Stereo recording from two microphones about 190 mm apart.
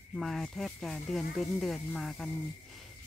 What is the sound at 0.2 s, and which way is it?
Speech, centre (ahead or behind).